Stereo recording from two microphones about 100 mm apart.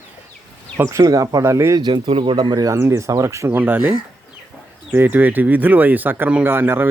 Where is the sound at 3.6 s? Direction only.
15° right (ahead or behind).